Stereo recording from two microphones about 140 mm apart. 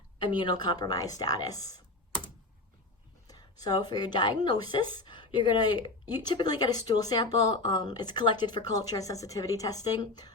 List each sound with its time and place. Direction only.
0.2 s speech: 35° left (ahead or behind)
3.2 s speech: 30° left (ahead or behind)